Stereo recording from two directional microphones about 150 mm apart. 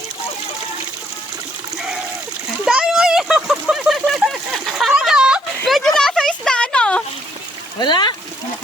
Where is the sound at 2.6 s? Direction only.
5° right (ahead or behind).